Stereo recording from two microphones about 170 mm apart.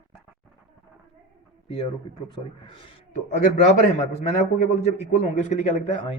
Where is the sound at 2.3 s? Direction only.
30° left (ahead or behind).